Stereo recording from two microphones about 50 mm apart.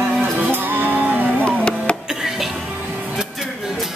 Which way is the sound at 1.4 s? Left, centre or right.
Centre.